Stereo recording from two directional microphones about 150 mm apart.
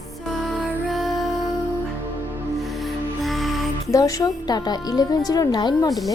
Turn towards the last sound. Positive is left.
turn(degrees=25)  # may be behind; listen again after turning